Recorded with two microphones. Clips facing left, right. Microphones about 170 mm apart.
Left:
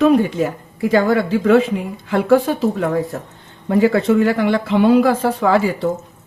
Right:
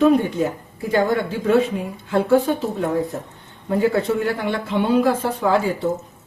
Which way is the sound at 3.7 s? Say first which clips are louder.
Left 5 dB; 85° left.